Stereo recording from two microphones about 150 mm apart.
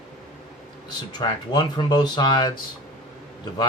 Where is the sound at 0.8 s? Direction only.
30° left (ahead or behind).